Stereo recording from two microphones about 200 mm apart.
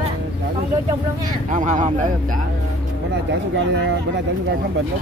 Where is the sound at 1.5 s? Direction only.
40° right (ahead or behind).